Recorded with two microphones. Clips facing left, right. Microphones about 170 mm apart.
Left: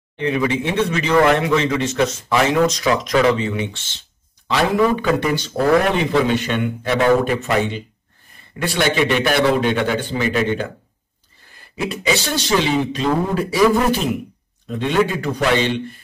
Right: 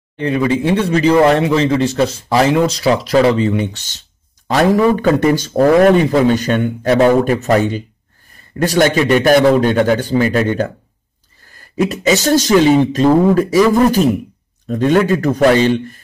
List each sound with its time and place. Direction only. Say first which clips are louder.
0.2 s speech: right 4 dB; 35° right (ahead or behind)
11.7 s speech: right 6 dB; 40° right (ahead or behind)